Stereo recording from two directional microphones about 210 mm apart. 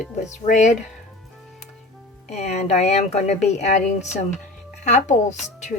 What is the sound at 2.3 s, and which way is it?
Speech, 30° left (ahead or behind).